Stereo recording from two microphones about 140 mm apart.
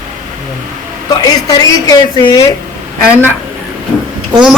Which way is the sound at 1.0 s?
25° left (ahead or behind).